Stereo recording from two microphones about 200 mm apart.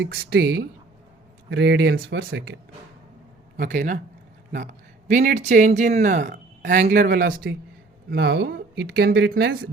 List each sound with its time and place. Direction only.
0.0 s speech: 55° right (ahead or behind)
3.6 s speech: 40° right (ahead or behind)
5.0 s speech: 40° right (ahead or behind)
8.1 s speech: 60° right (ahead or behind)